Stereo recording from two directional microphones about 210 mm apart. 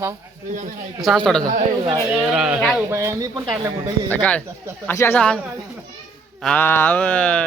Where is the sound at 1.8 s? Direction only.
20° right (ahead or behind).